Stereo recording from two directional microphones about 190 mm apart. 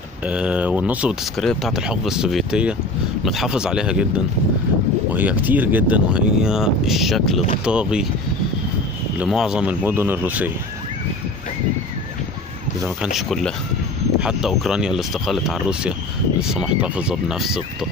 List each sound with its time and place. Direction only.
0.2 s speech: 5° right (ahead or behind)
9.2 s speech: 5° right (ahead or behind)
13.3 s speech: centre (ahead or behind)